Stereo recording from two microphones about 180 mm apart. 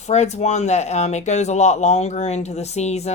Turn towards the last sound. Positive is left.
turn(degrees=40)  # may be behind; listen again after turning